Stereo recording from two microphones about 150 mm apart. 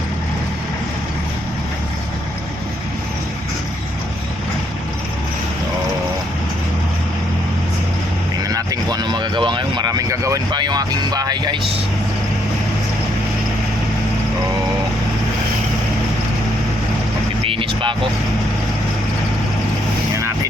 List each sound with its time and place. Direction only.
8.4 s speech: 25° right (ahead or behind)
17.4 s vehicle: 35° right (ahead or behind)